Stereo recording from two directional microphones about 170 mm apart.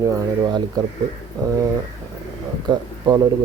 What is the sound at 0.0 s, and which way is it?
Speech, 20° right (ahead or behind).